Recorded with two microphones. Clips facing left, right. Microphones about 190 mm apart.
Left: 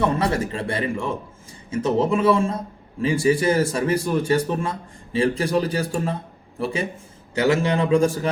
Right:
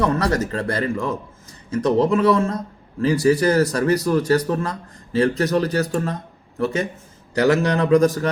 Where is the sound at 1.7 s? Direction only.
5° left (ahead or behind).